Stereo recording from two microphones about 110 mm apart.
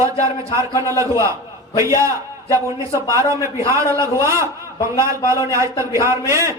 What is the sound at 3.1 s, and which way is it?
A man's voice, 30° right (ahead or behind).